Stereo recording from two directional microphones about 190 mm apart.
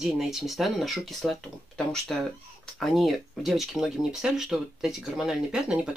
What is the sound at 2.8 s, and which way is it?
Speech, centre (ahead or behind).